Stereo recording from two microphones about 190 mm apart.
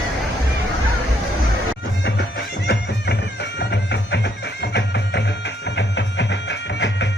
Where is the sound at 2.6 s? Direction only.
60° left (ahead or behind).